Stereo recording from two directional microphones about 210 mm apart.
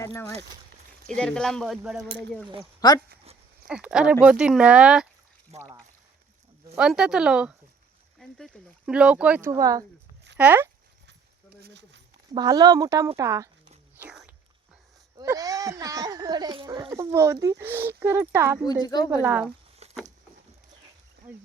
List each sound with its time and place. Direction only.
0.0 s speech: 15° left (ahead or behind); by 2.0 s 5° right (ahead or behind)
2.8 s a woman's voice: 20° left (ahead or behind)
3.7 s speech: 5° right (ahead or behind)
5.5 s speech: 30° right (ahead or behind)
6.7 s speech: 5° right (ahead or behind)
11.6 s a sound: 55° right (ahead or behind)
12.3 s speech: 20° right (ahead or behind)
14.0 s a sound: 5° right (ahead or behind)
15.2 s speech: 15° right (ahead or behind)
18.6 s a woman's voice: 20° left (ahead or behind)
19.2 s speech: 5° right (ahead or behind)
19.8 s a sound: 30° right (ahead or behind)